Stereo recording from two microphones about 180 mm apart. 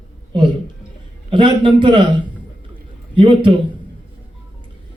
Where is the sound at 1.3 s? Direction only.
25° right (ahead or behind).